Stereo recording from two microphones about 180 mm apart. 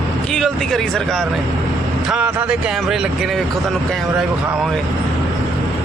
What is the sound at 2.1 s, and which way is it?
Speech, 5° right (ahead or behind).